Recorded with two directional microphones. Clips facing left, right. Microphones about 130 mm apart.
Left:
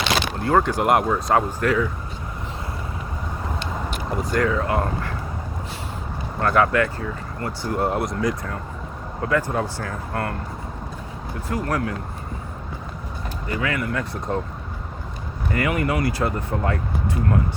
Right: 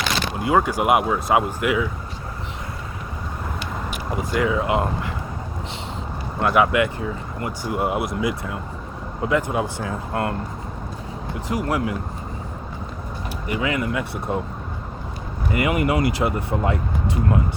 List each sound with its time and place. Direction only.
0.3 s speech: 10° right (ahead or behind)
3.8 s speech: 10° right (ahead or behind)
6.4 s speech: 10° right (ahead or behind)
11.3 s speech: 15° right (ahead or behind)
13.5 s speech: 20° right (ahead or behind)
15.5 s speech: 15° right (ahead or behind)